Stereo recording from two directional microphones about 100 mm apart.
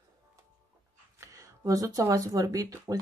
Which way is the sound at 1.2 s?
35° right (ahead or behind).